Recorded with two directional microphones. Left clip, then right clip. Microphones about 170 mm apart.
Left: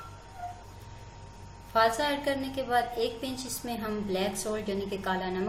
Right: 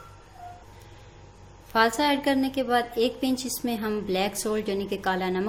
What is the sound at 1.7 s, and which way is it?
A woman's voice, 60° right (ahead or behind).